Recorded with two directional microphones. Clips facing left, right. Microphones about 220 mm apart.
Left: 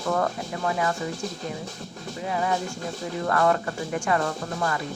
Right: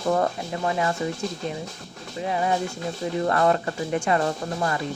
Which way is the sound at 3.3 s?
25° right (ahead or behind).